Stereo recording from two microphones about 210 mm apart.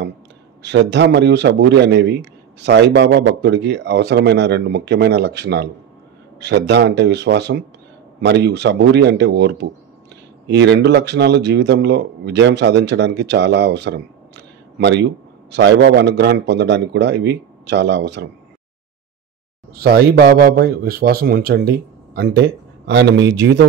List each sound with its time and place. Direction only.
0.6 s a man's voice: 55° right (ahead or behind)
19.7 s a man's voice: 45° right (ahead or behind)